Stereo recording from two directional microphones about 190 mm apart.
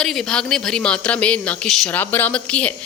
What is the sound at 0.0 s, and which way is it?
Speech, centre (ahead or behind).